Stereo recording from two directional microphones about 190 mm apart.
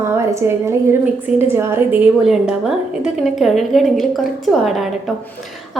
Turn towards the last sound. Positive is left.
turn(degrees=0)  # may be behind; listen again after turning